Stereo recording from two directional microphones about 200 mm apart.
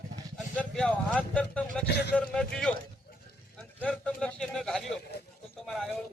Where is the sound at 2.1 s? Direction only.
5° left (ahead or behind).